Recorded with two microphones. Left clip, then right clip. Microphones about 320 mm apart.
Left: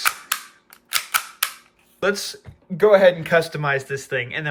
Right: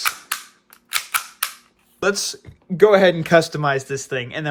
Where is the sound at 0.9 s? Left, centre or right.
Centre.